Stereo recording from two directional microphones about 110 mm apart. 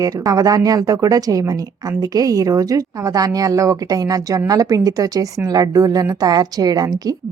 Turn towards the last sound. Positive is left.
turn(degrees=-35)  # may be behind; listen again after turning